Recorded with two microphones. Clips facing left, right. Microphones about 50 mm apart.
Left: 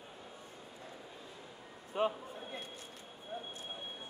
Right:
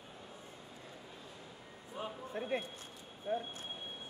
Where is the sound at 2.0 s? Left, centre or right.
Left.